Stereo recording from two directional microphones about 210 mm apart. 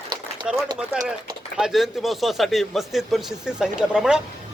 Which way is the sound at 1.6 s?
Centre (ahead or behind).